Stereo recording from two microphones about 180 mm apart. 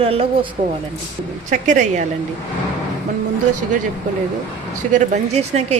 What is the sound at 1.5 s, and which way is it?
Speech, 40° right (ahead or behind).